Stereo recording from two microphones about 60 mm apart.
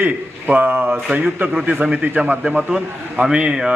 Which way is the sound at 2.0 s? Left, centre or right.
Right.